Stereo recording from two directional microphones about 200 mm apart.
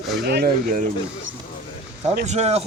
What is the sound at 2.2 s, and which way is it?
Speech, 35° right (ahead or behind).